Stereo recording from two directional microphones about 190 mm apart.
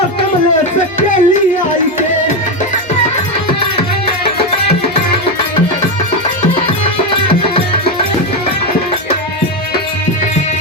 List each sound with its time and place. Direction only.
0.9 s music: 40° left (ahead or behind)